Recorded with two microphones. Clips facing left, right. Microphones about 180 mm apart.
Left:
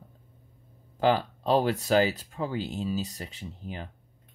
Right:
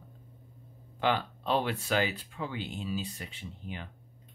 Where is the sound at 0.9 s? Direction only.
35° left (ahead or behind).